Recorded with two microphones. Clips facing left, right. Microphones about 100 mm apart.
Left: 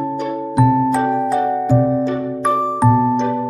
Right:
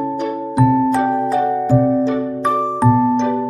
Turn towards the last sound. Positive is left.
turn(degrees=5)  # may be behind; listen again after turning